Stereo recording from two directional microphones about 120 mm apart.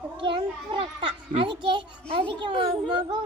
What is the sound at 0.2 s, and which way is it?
A child's voice, 45° right (ahead or behind).